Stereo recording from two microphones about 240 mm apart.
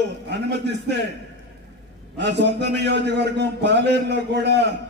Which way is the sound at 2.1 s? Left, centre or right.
Right.